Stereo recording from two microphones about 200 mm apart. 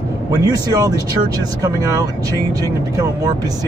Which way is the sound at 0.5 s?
20° right (ahead or behind).